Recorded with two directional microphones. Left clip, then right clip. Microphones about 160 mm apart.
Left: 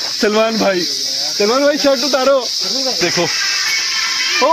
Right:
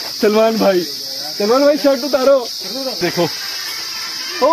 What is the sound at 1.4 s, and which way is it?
Speech, 15° left (ahead or behind).